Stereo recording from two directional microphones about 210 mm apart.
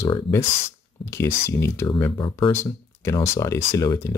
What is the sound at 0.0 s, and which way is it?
Speech, 15° left (ahead or behind).